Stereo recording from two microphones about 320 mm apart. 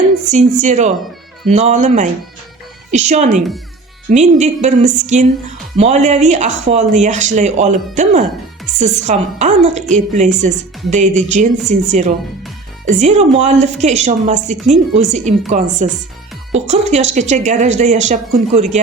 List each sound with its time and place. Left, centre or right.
0.6 s a woman's voice: right